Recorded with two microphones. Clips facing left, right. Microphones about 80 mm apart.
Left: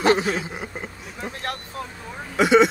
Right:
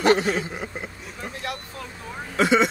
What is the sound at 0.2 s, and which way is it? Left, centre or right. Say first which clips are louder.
Speech: even; centre.